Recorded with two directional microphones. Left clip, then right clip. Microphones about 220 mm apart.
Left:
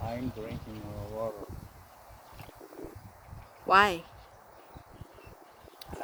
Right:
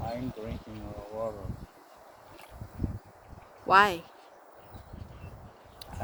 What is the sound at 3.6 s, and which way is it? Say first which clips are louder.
Speech: right 1 dB; centre (ahead or behind).